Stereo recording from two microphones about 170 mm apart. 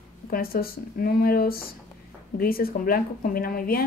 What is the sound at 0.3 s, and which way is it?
Speech, 60° left (ahead or behind).